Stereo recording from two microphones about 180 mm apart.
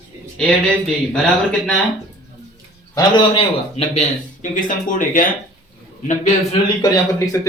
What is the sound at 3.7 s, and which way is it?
Speech, 40° left (ahead or behind).